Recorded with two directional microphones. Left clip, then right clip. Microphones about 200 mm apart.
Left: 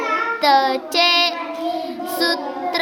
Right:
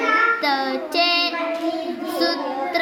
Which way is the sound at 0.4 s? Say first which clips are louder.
Left 6 dB; 35° left (ahead or behind).